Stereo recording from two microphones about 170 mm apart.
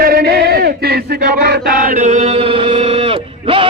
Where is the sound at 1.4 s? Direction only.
70° right (ahead or behind); by 3.6 s 35° right (ahead or behind).